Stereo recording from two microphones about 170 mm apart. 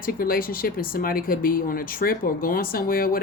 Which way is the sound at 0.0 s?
60° left (ahead or behind).